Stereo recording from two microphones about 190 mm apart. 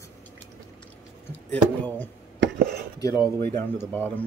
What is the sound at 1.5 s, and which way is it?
Speech, 10° left (ahead or behind).